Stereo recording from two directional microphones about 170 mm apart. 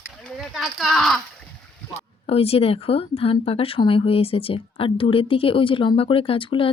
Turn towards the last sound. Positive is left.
turn(degrees=30)  # may be behind; listen again after turning